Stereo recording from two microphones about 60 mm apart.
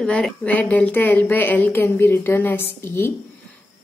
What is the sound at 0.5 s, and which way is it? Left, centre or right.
A woman's voice, left.